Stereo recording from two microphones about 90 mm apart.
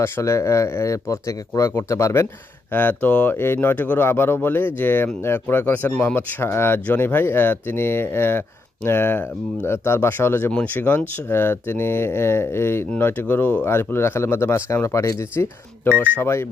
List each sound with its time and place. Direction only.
0.0 s speech: 35° left (ahead or behind)
2.7 s speech: 20° left (ahead or behind)